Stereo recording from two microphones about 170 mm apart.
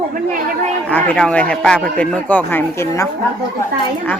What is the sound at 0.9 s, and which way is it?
A man's voice, 10° left (ahead or behind).